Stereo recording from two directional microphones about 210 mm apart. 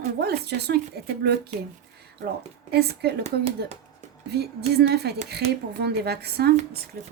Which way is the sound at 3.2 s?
30° right (ahead or behind).